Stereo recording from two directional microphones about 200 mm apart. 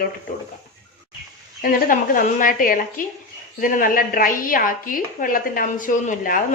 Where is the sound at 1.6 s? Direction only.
40° left (ahead or behind).